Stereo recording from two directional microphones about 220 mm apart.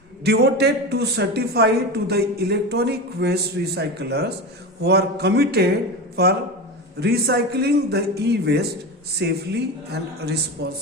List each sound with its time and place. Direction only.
0.3 s a man's voice: 50° right (ahead or behind)
7.0 s a man's voice: 45° right (ahead or behind)